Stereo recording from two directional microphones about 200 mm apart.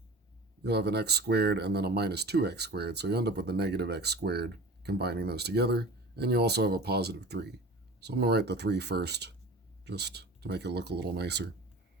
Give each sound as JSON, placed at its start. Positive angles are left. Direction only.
{"t": 0.6, "sound": "speech", "side_deg": -55}